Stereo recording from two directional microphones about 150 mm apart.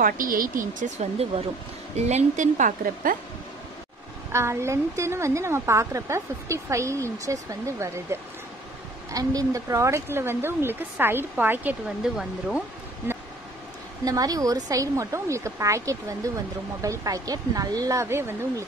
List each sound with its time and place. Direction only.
0.0 s speech: 70° right (ahead or behind)
4.3 s a woman's voice: 20° right (ahead or behind)
13.0 s vehicle: 15° right (ahead or behind)
14.0 s a woman's voice: 25° right (ahead or behind)